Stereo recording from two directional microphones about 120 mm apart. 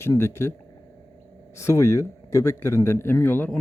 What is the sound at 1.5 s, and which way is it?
Speech, 25° left (ahead or behind).